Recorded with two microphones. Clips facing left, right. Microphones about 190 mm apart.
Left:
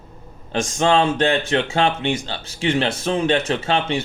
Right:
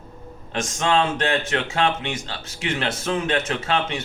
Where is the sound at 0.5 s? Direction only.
30° left (ahead or behind).